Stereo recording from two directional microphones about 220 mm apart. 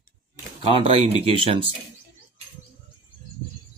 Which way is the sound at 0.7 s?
25° right (ahead or behind).